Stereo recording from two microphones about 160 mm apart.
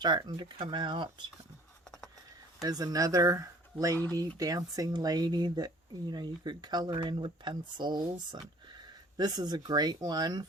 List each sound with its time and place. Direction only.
0.0 s speech: 25° right (ahead or behind)
2.6 s speech: 25° right (ahead or behind)
3.9 s speech: 15° left (ahead or behind)
4.4 s speech: 25° right (ahead or behind)